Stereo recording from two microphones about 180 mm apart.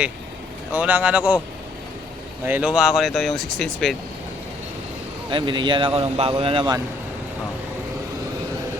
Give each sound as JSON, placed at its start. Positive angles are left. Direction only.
{"t": 0.7, "sound": "speech", "side_deg": -10}
{"t": 2.4, "sound": "speech", "side_deg": -10}
{"t": 5.3, "sound": "speech", "side_deg": -25}